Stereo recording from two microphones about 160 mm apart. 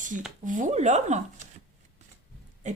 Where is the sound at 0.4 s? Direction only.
55° right (ahead or behind).